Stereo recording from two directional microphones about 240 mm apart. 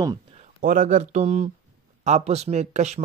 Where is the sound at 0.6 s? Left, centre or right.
Right.